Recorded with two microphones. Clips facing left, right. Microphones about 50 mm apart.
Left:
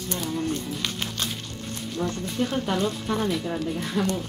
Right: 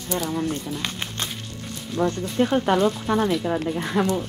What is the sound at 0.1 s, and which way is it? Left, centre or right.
Speech, right.